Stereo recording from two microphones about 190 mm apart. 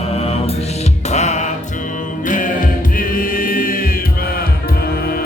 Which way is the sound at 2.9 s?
50° left (ahead or behind).